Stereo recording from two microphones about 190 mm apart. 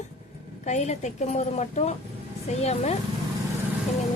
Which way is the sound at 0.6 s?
35° left (ahead or behind).